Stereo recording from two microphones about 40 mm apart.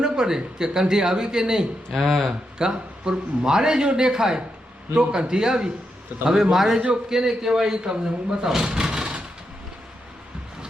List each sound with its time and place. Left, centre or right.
0.0 s a man's voice: centre
1.9 s speech: centre
2.6 s a man's voice: centre
8.4 s a man's voice: centre
8.7 s a sound: centre